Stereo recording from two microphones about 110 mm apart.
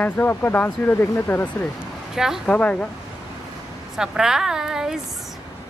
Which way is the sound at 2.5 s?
10° left (ahead or behind).